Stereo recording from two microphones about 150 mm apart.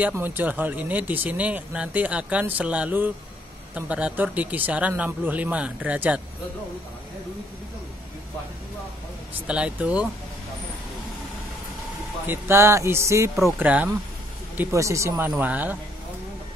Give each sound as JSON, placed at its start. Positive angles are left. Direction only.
{"t": 0.2, "sound": "speech", "side_deg": -10}
{"t": 9.5, "sound": "speech", "side_deg": -10}
{"t": 12.3, "sound": "speech", "side_deg": -15}